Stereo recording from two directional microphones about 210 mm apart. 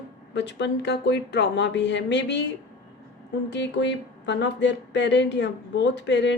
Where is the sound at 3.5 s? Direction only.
60° left (ahead or behind).